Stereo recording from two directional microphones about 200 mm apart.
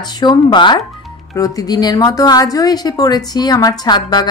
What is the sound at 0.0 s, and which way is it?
A woman's voice, 20° left (ahead or behind).